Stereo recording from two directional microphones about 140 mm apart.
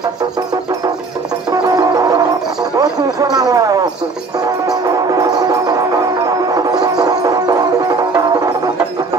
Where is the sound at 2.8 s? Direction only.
25° right (ahead or behind).